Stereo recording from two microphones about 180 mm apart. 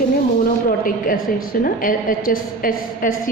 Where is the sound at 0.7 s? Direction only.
50° left (ahead or behind).